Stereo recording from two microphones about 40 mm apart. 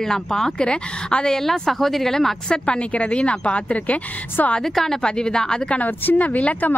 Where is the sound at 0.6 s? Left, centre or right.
Left.